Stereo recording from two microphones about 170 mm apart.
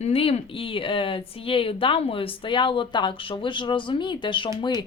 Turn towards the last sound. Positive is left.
turn(degrees=25)  # may be behind; listen again after turning